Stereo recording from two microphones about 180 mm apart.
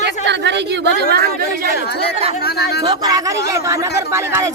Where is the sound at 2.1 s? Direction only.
35° right (ahead or behind).